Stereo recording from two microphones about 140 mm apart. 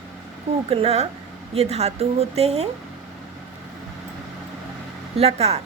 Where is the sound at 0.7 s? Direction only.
45° right (ahead or behind).